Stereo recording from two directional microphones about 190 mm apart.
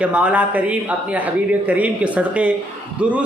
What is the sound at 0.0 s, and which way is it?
A man's voice, 5° right (ahead or behind).